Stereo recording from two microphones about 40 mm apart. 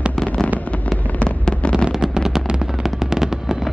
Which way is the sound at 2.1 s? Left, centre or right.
Centre.